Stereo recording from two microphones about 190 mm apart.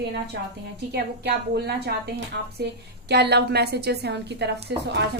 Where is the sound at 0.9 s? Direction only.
60° right (ahead or behind).